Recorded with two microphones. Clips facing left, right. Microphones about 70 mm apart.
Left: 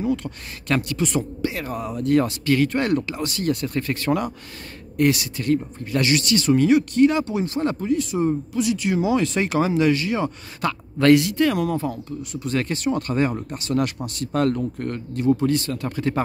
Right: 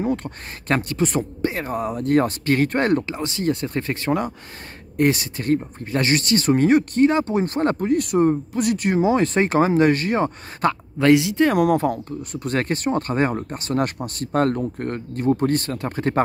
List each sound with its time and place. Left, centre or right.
0.0 s speech: right
3.0 s speech: right
11.0 s speech: centre
11.5 s speech: right
12.4 s speech: right